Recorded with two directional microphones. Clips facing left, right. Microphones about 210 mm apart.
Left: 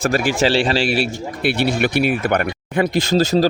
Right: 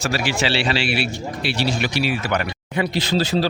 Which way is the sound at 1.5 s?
55° left (ahead or behind).